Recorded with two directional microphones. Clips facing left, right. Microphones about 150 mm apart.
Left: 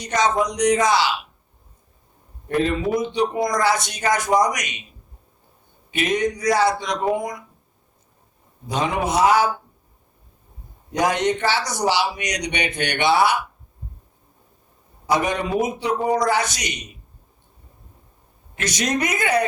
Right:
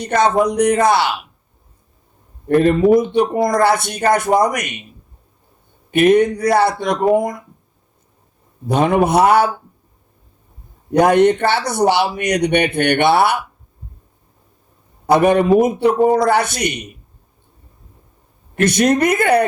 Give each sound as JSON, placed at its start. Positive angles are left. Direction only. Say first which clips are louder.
{"t": 0.0, "sound": "speech", "louder": "right 6 dB", "side_deg": -55}
{"t": 2.5, "sound": "speech", "louder": "right 9 dB", "side_deg": -55}
{"t": 5.9, "sound": "speech", "louder": "right 10 dB", "side_deg": -55}
{"t": 8.6, "sound": "speech", "louder": "right 8 dB", "side_deg": -55}
{"t": 10.9, "sound": "speech", "louder": "right 9 dB", "side_deg": -60}
{"t": 15.0, "sound": "speech", "louder": "right 9 dB", "side_deg": -60}
{"t": 18.5, "sound": "speech", "louder": "right 9 dB", "side_deg": -55}